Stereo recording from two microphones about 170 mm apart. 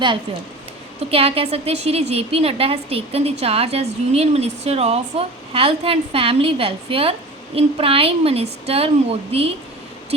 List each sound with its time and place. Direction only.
1.1 s a woman's voice: 35° right (ahead or behind)